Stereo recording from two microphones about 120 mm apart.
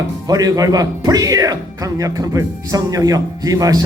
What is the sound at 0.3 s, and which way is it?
A man's voice, 30° right (ahead or behind).